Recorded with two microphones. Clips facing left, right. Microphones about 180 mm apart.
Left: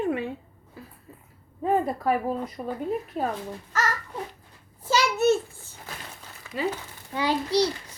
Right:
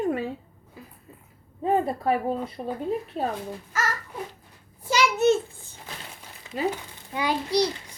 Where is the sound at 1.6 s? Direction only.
25° right (ahead or behind).